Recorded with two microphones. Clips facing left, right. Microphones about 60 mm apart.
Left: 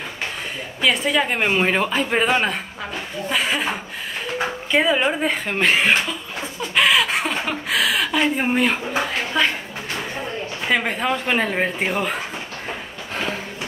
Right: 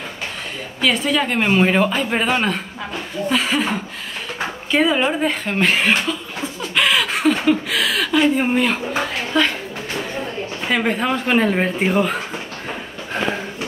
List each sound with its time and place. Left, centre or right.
0.7 s a woman's voice: centre
4.8 s a woman's voice: centre
6.7 s a sound: centre
8.4 s a woman's voice: centre
9.3 s a woman's voice: centre
10.7 s speech: centre